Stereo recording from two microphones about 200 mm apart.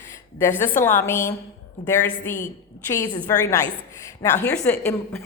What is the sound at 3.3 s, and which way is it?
A woman's voice, 15° left (ahead or behind).